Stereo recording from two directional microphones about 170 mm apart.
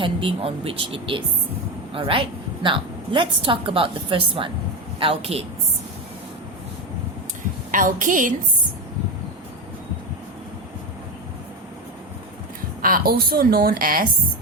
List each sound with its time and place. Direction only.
0.0 s a woman's voice: 30° right (ahead or behind)
7.7 s a woman's voice: 50° right (ahead or behind)
12.8 s a woman's voice: 60° right (ahead or behind)